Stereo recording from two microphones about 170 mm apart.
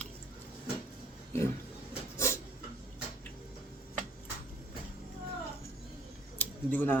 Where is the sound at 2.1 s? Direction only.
15° left (ahead or behind).